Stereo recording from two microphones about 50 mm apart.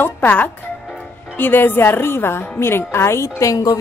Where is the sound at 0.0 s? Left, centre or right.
Left.